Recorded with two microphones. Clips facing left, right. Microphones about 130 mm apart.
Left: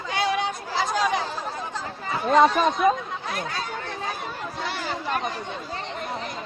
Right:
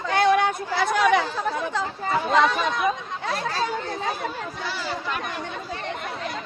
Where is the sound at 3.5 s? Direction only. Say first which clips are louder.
Right 5 dB; 40° right (ahead or behind).